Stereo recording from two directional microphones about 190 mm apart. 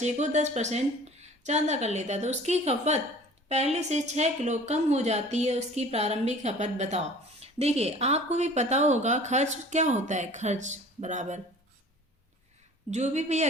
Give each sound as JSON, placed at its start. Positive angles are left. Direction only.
{"t": 0.0, "sound": "a woman's voice", "side_deg": -40}
{"t": 12.9, "sound": "a woman's voice", "side_deg": -35}